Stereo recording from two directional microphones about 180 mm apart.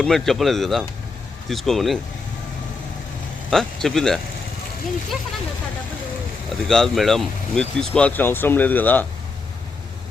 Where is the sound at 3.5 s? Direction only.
Centre (ahead or behind).